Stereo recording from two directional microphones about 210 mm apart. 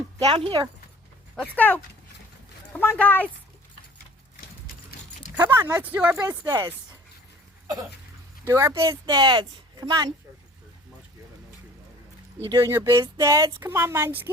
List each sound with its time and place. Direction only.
0.2 s speech: 25° right (ahead or behind)
1.5 s speech: 10° left (ahead or behind)
3.0 s speech: 10° left (ahead or behind)
5.4 s speech: 10° right (ahead or behind)
8.4 s speech: 15° right (ahead or behind)
12.5 s speech: 15° right (ahead or behind)